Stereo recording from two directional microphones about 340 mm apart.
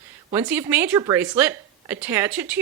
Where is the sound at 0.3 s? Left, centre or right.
Centre.